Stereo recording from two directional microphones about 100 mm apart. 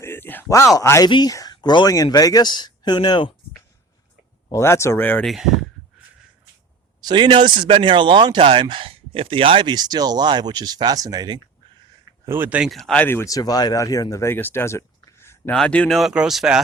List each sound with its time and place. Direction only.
0.0 s a sound: 20° left (ahead or behind)
0.4 s speech: 30° left (ahead or behind)
1.0 s speech: 45° left (ahead or behind)
4.5 s speech: 25° left (ahead or behind)
5.2 s speech: centre (ahead or behind)
7.0 s speech: 50° right (ahead or behind)
8.4 s speech: 70° right (ahead or behind)
9.6 s speech: 45° right (ahead or behind)
12.2 s speech: 20° right (ahead or behind)
12.6 s speech: centre (ahead or behind)
13.0 s speech: 20° left (ahead or behind)
13.2 s speech: 40° left (ahead or behind)
15.5 s speech: 10° left (ahead or behind)
16.0 s speech: 5° right (ahead or behind)